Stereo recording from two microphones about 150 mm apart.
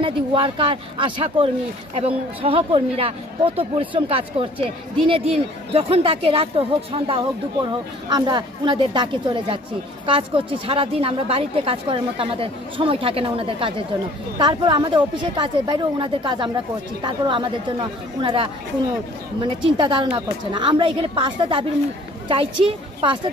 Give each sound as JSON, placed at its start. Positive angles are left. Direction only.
{"t": 0.0, "sound": "a woman's voice", "side_deg": -35}